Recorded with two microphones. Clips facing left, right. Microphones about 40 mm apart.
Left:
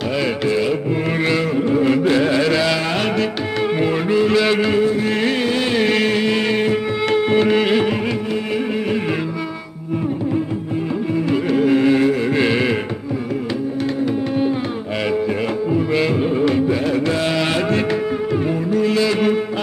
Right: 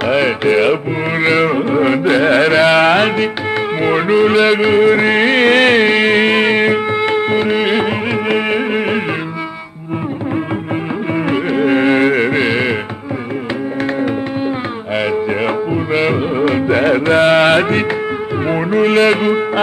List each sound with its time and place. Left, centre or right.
0.1 s music: right
1.2 s carnatic music: right
1.7 s music: right
3.8 s a sound: right
4.8 s music: right
5.1 s music: right
5.8 s music: right
7.0 s music: right
8.3 s music: right
11.2 s music: right
12.3 s music: centre
15.4 s music: right
18.5 s a sound: right